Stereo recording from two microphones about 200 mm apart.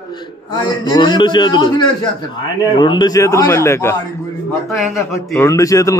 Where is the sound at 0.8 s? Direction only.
20° left (ahead or behind).